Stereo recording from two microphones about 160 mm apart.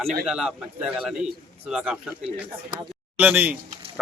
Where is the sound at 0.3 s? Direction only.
5° right (ahead or behind).